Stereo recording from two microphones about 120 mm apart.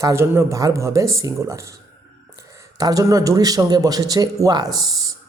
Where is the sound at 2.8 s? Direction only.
30° right (ahead or behind).